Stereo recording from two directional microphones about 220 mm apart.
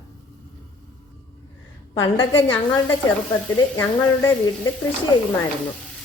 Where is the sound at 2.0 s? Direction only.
20° left (ahead or behind).